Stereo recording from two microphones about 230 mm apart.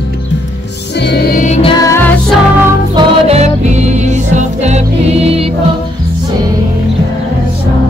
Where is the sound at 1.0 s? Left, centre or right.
Left.